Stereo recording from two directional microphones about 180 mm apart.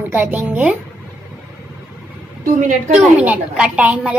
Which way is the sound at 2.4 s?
45° right (ahead or behind).